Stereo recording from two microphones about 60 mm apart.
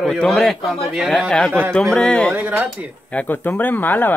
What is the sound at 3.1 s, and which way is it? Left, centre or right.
Speech, left.